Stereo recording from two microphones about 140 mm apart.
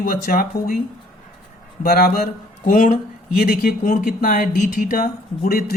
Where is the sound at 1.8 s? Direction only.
90° left.